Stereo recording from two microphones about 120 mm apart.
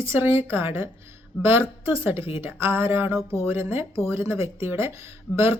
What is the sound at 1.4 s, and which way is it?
A woman's voice, 20° right (ahead or behind).